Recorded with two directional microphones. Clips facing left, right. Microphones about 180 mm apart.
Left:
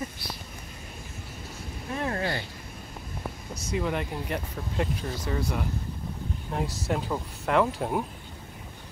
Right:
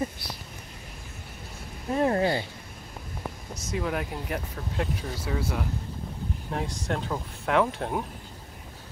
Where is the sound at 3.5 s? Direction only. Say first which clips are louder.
Left 1 dB; centre (ahead or behind).